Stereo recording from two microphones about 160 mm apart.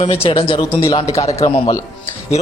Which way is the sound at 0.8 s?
20° left (ahead or behind).